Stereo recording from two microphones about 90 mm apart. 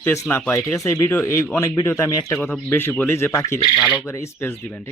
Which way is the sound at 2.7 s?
20° left (ahead or behind).